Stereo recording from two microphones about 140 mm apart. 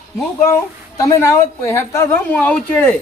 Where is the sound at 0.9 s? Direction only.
25° left (ahead or behind).